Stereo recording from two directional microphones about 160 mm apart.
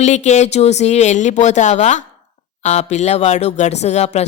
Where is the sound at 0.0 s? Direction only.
45° left (ahead or behind).